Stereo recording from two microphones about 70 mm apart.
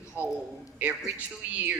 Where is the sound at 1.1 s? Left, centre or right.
Right.